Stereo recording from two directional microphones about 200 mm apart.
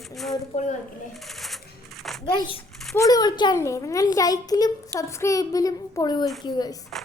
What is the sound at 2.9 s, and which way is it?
A child's voice, 15° left (ahead or behind).